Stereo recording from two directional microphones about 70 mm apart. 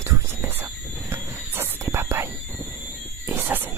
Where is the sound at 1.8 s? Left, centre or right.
Right.